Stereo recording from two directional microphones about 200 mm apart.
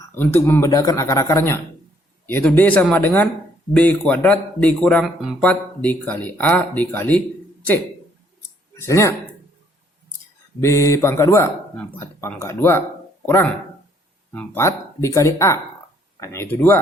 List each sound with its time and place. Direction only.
0.1 s speech: 10° left (ahead or behind)
8.7 s speech: 15° left (ahead or behind)
10.6 s speech: 15° left (ahead or behind)